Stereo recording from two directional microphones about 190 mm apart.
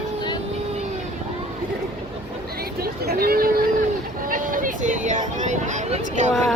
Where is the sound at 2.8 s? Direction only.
55° right (ahead or behind).